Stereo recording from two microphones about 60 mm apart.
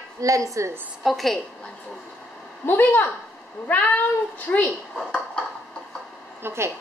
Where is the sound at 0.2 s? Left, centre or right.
Right.